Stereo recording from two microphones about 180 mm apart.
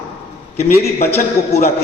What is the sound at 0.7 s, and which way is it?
Speech, 55° left (ahead or behind).